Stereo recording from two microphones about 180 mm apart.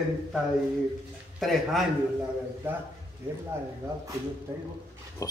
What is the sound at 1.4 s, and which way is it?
Speech, centre (ahead or behind).